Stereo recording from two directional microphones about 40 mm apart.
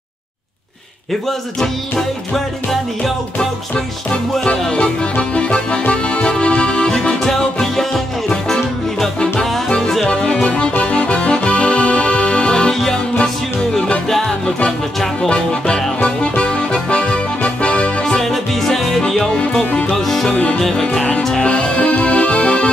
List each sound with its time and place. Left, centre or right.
1.6 s music: centre
3.3 s music: left
7.2 s music: centre
10.0 s music: left
10.8 s accordion: left
13.2 s music: left
14.0 s music: centre
15.2 s music: left
18.2 s music: centre
20.3 s music: left
20.6 s music: centre